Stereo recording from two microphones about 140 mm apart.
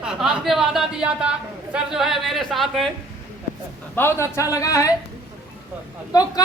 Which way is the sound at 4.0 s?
20° left (ahead or behind).